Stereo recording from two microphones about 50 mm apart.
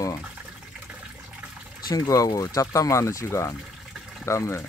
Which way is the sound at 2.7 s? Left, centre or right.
Left.